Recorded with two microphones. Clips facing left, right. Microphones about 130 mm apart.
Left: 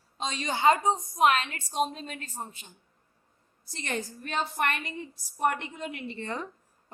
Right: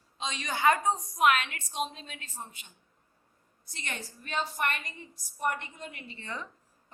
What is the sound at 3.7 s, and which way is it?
Speech, 35° left (ahead or behind).